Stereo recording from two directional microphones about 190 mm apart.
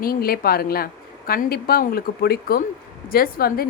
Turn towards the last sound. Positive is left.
turn(degrees=50)  # may be behind; listen again after turning